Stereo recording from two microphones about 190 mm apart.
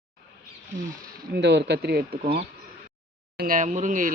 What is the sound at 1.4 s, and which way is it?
Speech, 65° right (ahead or behind).